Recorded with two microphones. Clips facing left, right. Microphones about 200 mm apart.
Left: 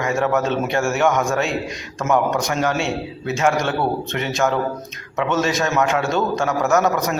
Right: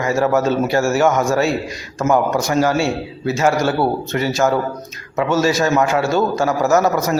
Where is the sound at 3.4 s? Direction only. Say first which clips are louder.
Right 3 dB; 35° right (ahead or behind).